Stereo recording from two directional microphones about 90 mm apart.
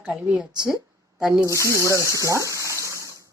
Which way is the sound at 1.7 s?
30° right (ahead or behind).